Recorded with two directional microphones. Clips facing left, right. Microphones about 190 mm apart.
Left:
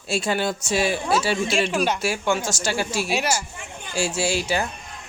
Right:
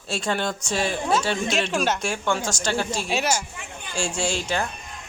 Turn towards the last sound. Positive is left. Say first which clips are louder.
# left 2 dB
turn(degrees=5)  # may be behind; listen again after turning